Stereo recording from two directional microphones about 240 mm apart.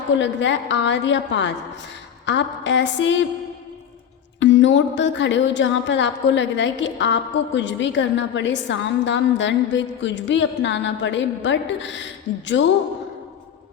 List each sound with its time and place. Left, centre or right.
0.2 s a woman's voice: left
4.4 s a woman's voice: left